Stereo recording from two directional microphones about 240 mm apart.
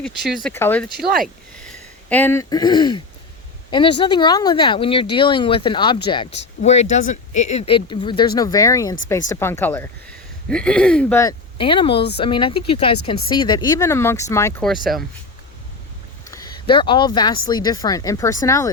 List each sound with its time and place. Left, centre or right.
0.0 s speech: centre
0.9 s speech: right
2.0 s speech: centre
6.6 s speech: left; by 14.7 s centre
16.3 s speech: centre